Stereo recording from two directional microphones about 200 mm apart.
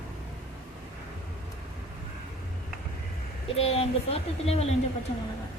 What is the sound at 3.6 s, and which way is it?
Speech, 30° left (ahead or behind).